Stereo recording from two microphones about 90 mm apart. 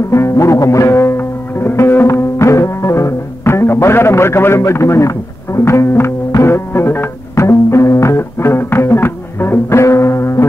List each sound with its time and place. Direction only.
0.1 s music: 35° left (ahead or behind)